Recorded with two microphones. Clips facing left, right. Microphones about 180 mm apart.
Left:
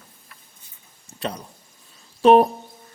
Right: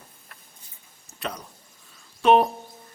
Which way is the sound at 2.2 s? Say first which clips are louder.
Left 4 dB; 35° left (ahead or behind).